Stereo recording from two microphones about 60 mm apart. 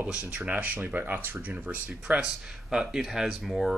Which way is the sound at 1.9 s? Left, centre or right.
Centre.